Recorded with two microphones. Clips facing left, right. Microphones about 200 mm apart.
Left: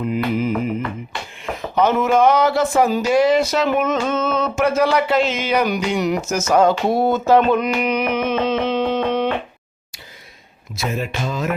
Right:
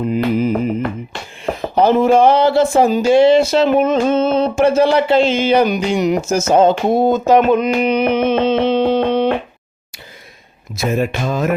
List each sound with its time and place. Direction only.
0.0 s music: 35° right (ahead or behind)
1.5 s speech: 35° right (ahead or behind)
6.5 s a sound: 25° right (ahead or behind)
7.8 s music: 30° right (ahead or behind)
10.8 s speech: 50° right (ahead or behind)